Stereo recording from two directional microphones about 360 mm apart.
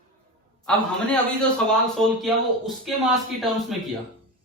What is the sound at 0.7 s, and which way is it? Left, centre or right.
Speech, centre.